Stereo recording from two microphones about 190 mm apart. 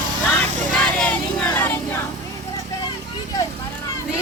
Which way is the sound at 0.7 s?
10° left (ahead or behind).